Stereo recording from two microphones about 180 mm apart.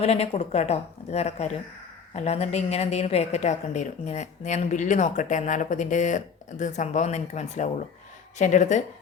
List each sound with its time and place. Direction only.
0.0 s a woman's voice: 35° left (ahead or behind)